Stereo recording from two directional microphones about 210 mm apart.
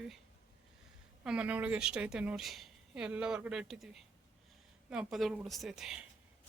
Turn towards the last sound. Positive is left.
turn(degrees=0)  # may be behind; listen again after turning